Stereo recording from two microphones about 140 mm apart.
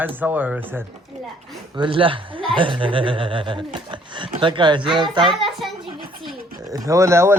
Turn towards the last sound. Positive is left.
turn(degrees=-20)  # may be behind; listen again after turning